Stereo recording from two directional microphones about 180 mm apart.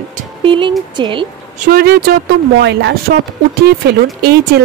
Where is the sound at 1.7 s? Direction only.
60° right (ahead or behind).